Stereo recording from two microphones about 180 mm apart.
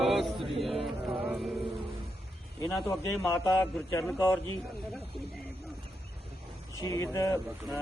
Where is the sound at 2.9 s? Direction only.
15° left (ahead or behind).